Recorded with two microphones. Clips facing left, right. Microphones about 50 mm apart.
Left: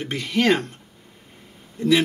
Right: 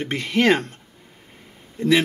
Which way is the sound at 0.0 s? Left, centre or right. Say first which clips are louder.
Right 2 dB; centre.